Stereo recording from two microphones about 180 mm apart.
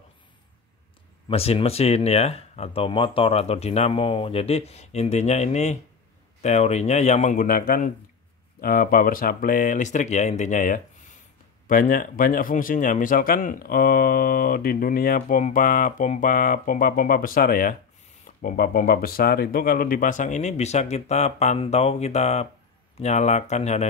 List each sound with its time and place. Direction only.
1.3 s speech: 35° left (ahead or behind)